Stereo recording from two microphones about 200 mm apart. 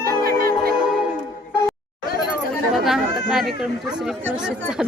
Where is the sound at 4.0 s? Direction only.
5° right (ahead or behind).